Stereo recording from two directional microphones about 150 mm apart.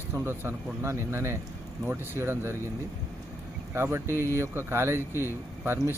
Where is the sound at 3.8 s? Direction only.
15° right (ahead or behind).